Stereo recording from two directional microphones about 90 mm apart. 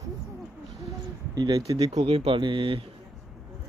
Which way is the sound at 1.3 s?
45° right (ahead or behind).